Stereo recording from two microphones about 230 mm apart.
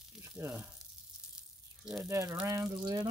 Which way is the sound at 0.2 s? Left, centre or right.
Centre.